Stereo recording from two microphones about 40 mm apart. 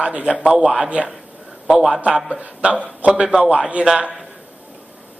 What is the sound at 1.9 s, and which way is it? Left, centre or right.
A man's voice, right.